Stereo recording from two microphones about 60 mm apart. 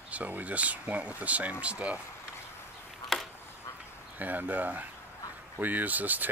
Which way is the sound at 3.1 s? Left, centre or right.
Centre.